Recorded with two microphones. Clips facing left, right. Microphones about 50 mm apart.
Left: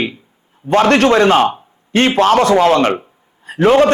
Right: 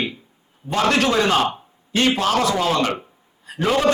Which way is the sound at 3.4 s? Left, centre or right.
Left.